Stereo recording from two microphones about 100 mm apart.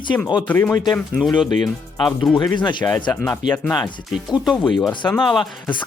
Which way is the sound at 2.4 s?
50° left (ahead or behind).